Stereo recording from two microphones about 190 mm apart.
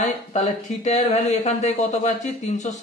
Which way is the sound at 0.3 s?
40° left (ahead or behind).